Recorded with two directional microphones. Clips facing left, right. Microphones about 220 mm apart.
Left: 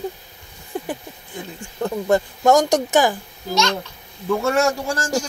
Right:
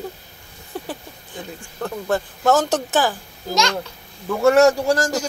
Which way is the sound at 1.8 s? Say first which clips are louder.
Left 4 dB; 15° left (ahead or behind).